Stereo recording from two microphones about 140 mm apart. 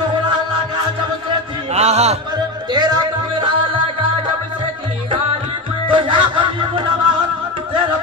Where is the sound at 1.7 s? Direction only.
50° right (ahead or behind).